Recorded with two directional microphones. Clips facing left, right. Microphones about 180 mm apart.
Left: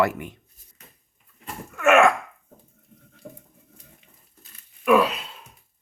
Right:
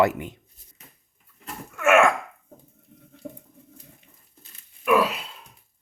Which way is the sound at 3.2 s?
10° right (ahead or behind).